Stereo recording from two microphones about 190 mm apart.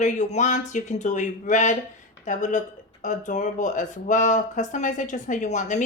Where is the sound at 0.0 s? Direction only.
40° left (ahead or behind).